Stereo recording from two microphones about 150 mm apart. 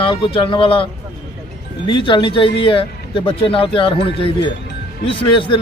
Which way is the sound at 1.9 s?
35° left (ahead or behind).